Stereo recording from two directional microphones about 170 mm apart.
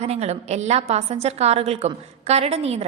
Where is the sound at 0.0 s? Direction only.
40° right (ahead or behind).